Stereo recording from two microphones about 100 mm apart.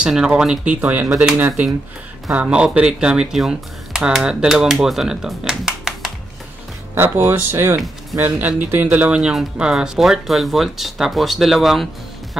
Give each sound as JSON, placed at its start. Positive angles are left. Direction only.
{"t": 0.0, "sound": "speech", "side_deg": -10}
{"t": 2.3, "sound": "speech", "side_deg": -10}
{"t": 7.0, "sound": "speech", "side_deg": -20}